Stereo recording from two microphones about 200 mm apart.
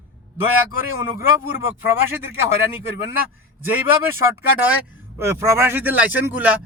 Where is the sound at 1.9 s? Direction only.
10° right (ahead or behind).